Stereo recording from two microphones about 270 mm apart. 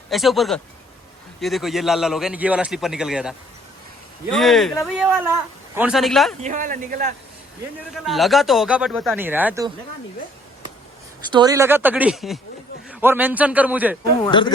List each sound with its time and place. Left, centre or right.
0.1 s a man's voice: centre
6.4 s speech: right
8.0 s a man's voice: centre
11.3 s a man's voice: centre
14.3 s speech: centre